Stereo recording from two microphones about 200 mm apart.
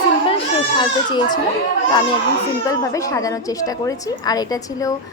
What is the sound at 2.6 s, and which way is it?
A woman's voice, 15° left (ahead or behind).